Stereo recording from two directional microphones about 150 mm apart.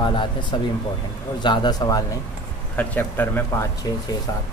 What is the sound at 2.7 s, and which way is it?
Speech, 10° left (ahead or behind).